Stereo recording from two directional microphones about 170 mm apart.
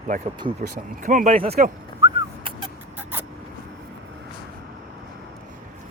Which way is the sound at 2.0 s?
30° right (ahead or behind).